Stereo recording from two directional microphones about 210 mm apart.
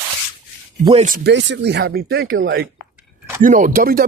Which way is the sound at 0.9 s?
30° right (ahead or behind).